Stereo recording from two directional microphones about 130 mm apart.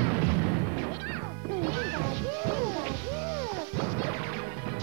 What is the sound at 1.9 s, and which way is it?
Music, 25° right (ahead or behind).